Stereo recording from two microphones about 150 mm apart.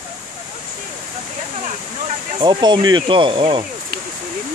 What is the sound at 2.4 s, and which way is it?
Speech, 30° right (ahead or behind).